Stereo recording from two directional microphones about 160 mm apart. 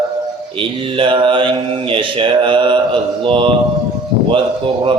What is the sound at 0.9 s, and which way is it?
Speech, 30° right (ahead or behind).